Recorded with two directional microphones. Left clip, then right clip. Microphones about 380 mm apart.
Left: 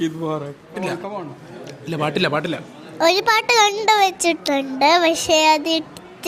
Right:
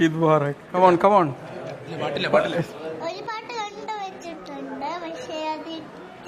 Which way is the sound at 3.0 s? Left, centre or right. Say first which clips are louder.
Left 19 dB; left.